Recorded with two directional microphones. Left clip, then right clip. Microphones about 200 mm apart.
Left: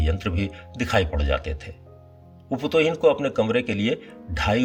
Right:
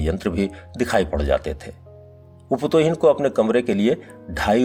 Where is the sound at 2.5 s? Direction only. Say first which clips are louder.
Right 3 dB; 45° right (ahead or behind).